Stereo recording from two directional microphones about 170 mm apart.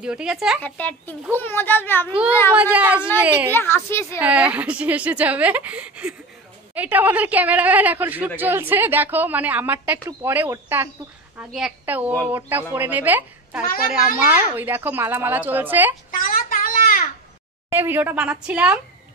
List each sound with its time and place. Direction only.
0.0 s a woman's voice: 5° right (ahead or behind)
0.6 s a child's voice: 10° left (ahead or behind)
2.5 s speech: 10° right (ahead or behind)
3.5 s a child's voice: 15° left (ahead or behind)
4.2 s speech: 10° right (ahead or behind)
16.1 s a sound: 55° left (ahead or behind)
17.6 s speech: 10° right (ahead or behind)